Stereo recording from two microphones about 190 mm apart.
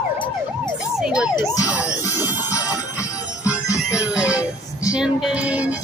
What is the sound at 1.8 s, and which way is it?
Music, 15° left (ahead or behind).